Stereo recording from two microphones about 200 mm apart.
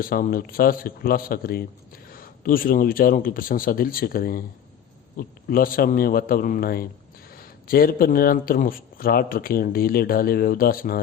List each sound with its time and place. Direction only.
0.0 s speech: 45° left (ahead or behind)